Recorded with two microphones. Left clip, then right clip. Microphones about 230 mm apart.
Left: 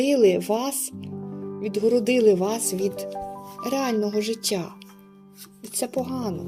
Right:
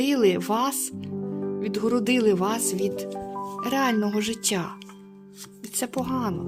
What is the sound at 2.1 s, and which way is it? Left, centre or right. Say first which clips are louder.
Music: left 3 dB; right.